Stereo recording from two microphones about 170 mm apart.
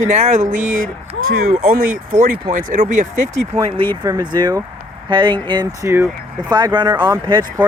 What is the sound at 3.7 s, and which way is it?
Speech, 30° right (ahead or behind).